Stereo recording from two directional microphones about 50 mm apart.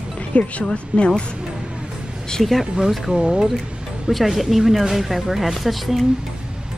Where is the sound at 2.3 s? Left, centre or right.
Centre.